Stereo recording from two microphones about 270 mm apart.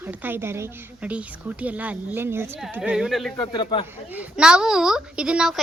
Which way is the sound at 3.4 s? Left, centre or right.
Centre.